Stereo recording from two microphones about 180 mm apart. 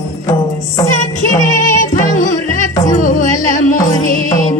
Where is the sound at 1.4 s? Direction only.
45° left (ahead or behind).